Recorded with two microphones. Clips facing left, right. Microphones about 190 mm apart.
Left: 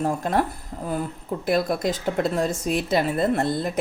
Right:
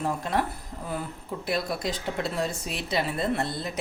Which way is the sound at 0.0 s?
45° left (ahead or behind).